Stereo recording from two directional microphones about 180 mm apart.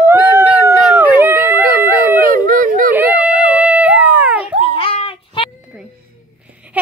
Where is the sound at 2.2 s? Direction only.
50° right (ahead or behind).